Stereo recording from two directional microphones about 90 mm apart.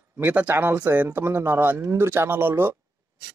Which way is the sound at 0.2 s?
20° right (ahead or behind).